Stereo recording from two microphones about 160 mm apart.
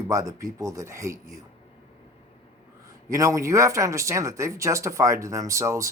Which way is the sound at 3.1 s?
20° right (ahead or behind).